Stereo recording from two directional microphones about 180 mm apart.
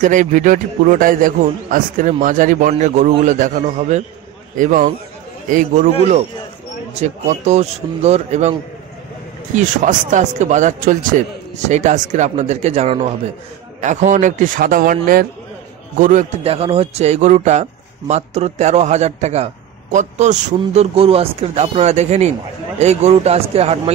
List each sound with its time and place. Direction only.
0.0 s a man's voice: 45° right (ahead or behind)
9.6 s a man's voice: 45° right (ahead or behind)